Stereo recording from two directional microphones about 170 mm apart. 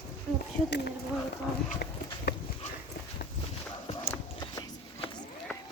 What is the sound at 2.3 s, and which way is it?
Dog, 85° left.